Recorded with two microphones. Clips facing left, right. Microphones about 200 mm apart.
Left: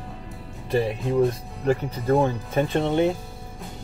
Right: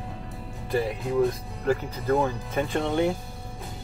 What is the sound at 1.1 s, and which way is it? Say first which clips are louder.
Speech: left 2 dB; 30° left (ahead or behind).